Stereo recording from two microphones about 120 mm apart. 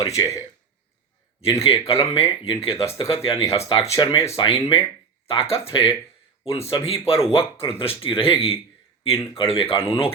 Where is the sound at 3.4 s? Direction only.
25° left (ahead or behind).